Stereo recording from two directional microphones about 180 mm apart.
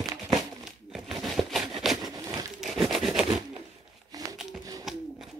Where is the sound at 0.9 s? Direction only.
Centre (ahead or behind).